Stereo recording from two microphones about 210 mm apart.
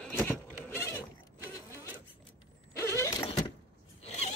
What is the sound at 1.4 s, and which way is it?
Vehicle, 15° left (ahead or behind).